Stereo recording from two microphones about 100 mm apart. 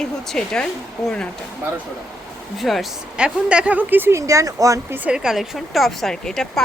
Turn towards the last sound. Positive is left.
turn(degrees=5)  # may be behind; listen again after turning